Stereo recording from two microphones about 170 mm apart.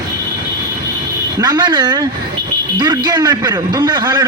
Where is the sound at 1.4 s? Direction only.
25° right (ahead or behind).